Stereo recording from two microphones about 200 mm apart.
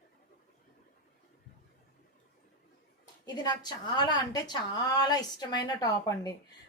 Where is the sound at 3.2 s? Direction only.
20° left (ahead or behind).